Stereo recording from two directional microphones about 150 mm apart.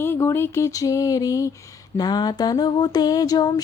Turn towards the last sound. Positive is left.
turn(degrees=25)  # may be behind; listen again after turning